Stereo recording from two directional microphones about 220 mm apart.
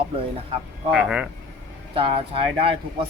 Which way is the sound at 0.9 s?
5° right (ahead or behind).